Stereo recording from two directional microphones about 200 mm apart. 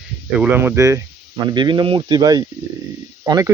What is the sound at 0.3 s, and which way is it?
Speech, 10° right (ahead or behind).